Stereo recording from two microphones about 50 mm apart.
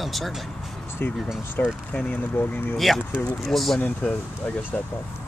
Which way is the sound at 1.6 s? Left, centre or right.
Left.